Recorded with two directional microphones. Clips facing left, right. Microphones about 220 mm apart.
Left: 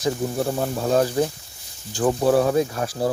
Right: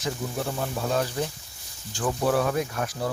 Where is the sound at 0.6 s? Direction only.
40° left (ahead or behind).